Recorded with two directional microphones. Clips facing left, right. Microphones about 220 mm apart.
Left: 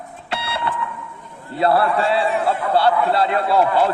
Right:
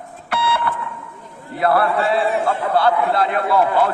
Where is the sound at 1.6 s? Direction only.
25° left (ahead or behind).